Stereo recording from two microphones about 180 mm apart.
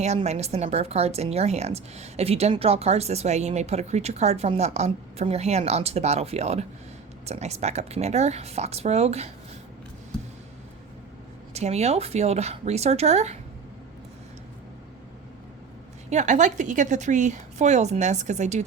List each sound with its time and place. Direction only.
0.0 s speech: 40° right (ahead or behind)
11.5 s speech: 35° right (ahead or behind)
16.0 s speech: 40° right (ahead or behind)